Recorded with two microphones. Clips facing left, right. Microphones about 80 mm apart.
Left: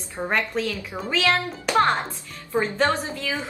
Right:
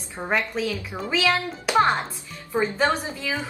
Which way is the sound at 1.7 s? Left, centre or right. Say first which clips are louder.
Even; centre.